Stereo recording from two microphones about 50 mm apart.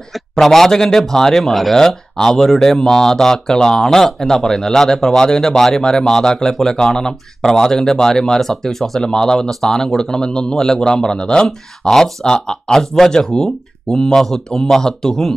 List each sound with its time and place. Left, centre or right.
0.1 s speech: centre